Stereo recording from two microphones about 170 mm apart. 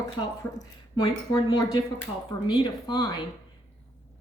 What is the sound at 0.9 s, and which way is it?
A woman's voice, 25° left (ahead or behind).